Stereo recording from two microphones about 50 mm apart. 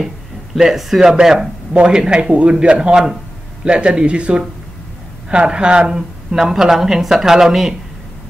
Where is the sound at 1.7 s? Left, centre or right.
Centre.